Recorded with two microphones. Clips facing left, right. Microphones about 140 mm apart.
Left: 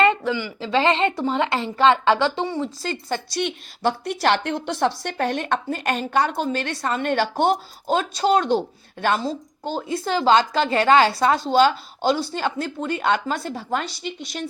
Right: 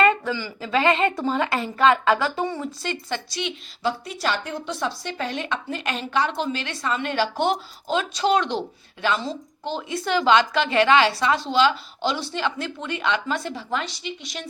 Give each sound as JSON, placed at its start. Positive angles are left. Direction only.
{"t": 0.0, "sound": "speech", "side_deg": 15}
{"t": 2.8, "sound": "a woman's voice", "side_deg": 40}